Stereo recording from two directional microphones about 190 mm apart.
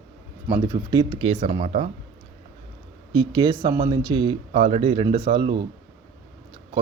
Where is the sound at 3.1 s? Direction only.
25° right (ahead or behind).